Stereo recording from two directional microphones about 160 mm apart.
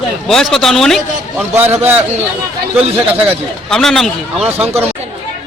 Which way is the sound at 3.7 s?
5° left (ahead or behind).